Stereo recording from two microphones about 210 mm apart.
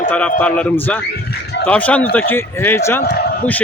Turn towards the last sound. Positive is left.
turn(degrees=50)  # may be behind; listen again after turning